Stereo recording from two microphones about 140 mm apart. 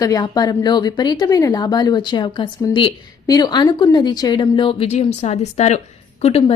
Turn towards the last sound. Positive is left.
turn(degrees=45)  # may be behind; listen again after turning